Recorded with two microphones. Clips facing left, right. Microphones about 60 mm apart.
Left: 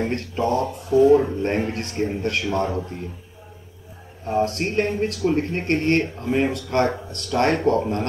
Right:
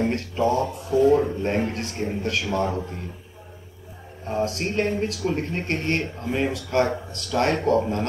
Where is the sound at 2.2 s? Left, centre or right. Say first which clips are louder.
Right 1 dB; centre.